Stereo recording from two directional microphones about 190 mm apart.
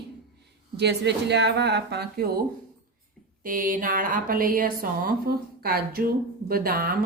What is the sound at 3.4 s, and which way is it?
Speech, 45° right (ahead or behind).